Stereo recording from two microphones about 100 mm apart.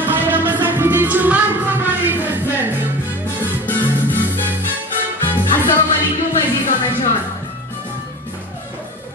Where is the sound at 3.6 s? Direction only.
20° left (ahead or behind).